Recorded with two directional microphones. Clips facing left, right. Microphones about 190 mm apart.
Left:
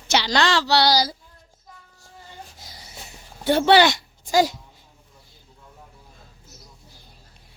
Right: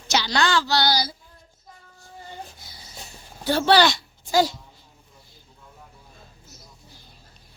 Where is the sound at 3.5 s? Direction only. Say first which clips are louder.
Left 2 dB; 20° left (ahead or behind).